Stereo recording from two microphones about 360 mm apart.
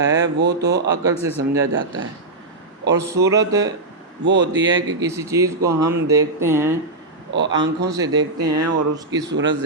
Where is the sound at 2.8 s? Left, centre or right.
Right.